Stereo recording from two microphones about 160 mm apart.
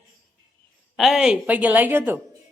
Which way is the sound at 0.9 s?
Centre (ahead or behind).